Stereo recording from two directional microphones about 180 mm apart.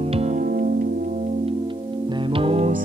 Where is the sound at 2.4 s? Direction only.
30° right (ahead or behind).